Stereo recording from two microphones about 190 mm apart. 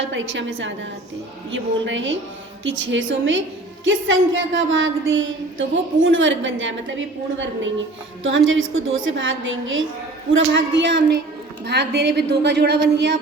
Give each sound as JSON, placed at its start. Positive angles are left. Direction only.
{"t": 0.0, "sound": "a woman's voice", "side_deg": -75}
{"t": 10.3, "sound": "a woman's voice", "side_deg": -70}